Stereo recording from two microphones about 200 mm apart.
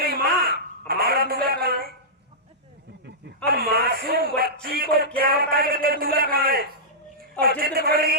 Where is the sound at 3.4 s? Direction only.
50° right (ahead or behind).